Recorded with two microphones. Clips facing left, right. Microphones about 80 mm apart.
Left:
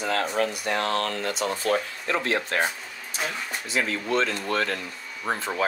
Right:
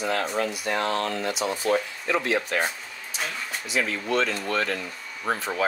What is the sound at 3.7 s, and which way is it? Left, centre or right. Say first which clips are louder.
Speech: even; left.